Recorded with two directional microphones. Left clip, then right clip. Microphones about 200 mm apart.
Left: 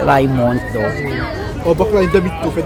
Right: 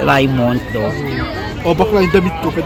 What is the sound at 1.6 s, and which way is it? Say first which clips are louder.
Speech: even; 30° right (ahead or behind).